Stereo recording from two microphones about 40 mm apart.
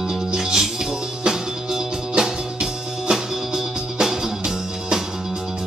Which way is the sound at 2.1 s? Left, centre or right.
Centre.